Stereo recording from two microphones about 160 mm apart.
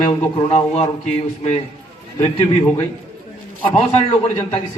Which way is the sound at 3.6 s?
35° left (ahead or behind).